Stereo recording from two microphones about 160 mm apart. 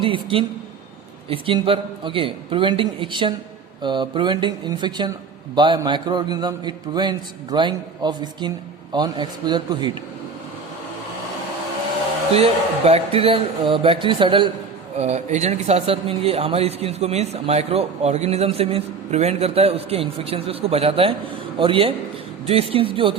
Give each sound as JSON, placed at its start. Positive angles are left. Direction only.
{"t": 0.0, "sound": "a man's voice", "side_deg": -35}
{"t": 12.3, "sound": "a man's voice", "side_deg": -40}
{"t": 14.9, "sound": "a man's voice", "side_deg": -45}